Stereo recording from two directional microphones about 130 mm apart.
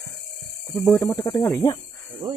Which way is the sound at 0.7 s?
20° left (ahead or behind).